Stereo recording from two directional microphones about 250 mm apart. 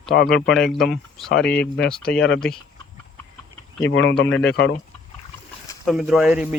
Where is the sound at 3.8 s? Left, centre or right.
Left.